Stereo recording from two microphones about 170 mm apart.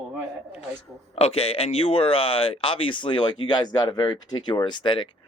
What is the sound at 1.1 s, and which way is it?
Speech, 35° left (ahead or behind).